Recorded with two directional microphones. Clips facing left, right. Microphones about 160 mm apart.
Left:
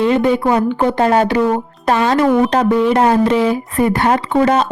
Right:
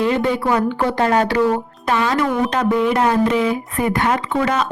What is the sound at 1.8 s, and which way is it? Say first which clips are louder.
Speech: left 6 dB; 40° left (ahead or behind).